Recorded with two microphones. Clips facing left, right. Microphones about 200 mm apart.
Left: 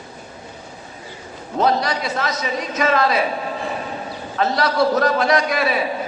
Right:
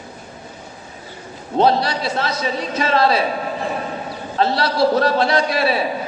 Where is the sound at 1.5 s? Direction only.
30° right (ahead or behind).